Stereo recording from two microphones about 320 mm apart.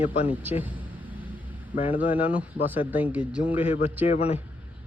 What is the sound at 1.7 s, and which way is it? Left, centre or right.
Speech, centre.